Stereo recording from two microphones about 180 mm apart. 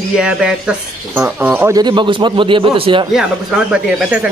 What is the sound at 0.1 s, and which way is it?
Speech, 5° right (ahead or behind).